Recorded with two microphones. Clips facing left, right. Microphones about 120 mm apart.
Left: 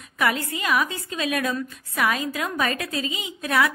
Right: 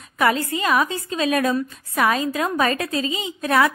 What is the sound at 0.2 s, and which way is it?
A woman's voice, 30° right (ahead or behind).